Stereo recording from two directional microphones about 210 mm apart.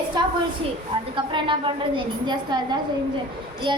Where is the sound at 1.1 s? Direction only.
25° right (ahead or behind).